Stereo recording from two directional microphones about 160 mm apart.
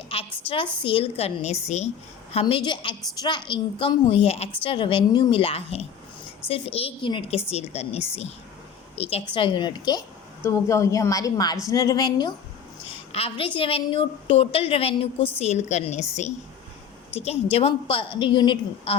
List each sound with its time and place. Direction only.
0.1 s a woman's voice: 35° left (ahead or behind)